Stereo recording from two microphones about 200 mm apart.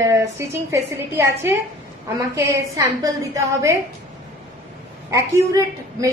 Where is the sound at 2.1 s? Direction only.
15° right (ahead or behind).